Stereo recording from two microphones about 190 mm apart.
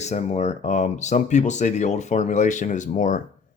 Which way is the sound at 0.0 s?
35° left (ahead or behind).